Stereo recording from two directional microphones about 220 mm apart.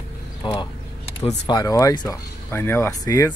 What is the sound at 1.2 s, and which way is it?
Speech, 20° left (ahead or behind).